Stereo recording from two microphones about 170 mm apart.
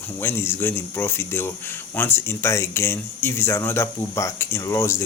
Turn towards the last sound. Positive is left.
turn(degrees=15)  # may be behind; listen again after turning